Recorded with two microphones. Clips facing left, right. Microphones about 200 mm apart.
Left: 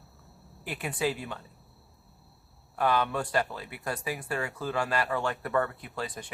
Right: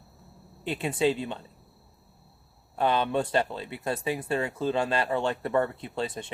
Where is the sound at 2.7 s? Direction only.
25° right (ahead or behind).